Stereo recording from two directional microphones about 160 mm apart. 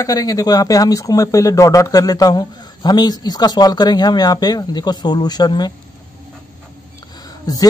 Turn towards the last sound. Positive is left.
turn(degrees=25)  # may be behind; listen again after turning